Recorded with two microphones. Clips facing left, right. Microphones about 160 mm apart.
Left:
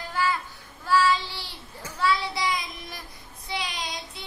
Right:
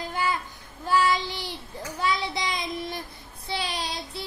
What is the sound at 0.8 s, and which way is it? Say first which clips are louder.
Child singing: left 1 dB; 15° right (ahead or behind).